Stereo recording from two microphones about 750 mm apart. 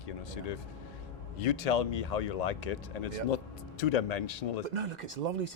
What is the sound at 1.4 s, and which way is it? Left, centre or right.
Speech, left.